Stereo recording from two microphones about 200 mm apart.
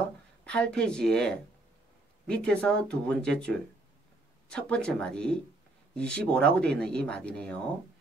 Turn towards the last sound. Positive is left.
turn(degrees=5)  # may be behind; listen again after turning